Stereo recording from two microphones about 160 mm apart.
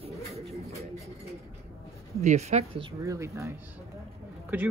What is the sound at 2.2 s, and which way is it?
Speech, 45° right (ahead or behind).